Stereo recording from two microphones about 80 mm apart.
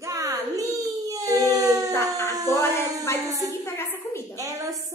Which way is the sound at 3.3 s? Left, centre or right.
Right.